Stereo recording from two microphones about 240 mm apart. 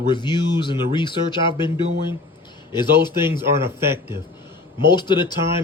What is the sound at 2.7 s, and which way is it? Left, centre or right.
Speech, centre.